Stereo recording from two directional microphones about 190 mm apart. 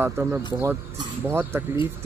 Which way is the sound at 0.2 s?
15° right (ahead or behind).